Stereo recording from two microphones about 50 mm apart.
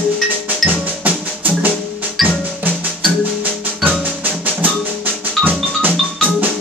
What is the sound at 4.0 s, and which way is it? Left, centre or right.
Music, right.